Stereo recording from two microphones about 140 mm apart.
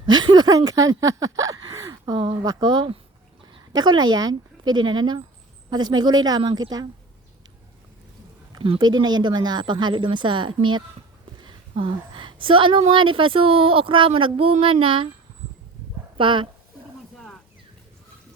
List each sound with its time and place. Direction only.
0.0 s speech: 30° right (ahead or behind)
8.5 s speech: 35° right (ahead or behind)
11.3 s a sound: 35° right (ahead or behind)
12.9 s speech: 35° right (ahead or behind)
16.1 s speech: 35° right (ahead or behind)